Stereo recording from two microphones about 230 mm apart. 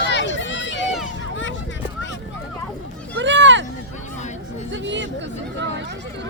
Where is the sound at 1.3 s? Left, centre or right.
Left.